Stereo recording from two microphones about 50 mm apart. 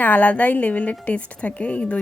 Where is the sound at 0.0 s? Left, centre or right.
Left.